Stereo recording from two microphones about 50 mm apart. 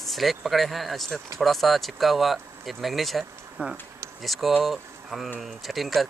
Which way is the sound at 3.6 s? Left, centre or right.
Right.